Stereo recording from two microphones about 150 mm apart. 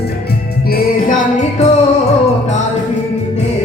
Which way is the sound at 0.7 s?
65° left (ahead or behind).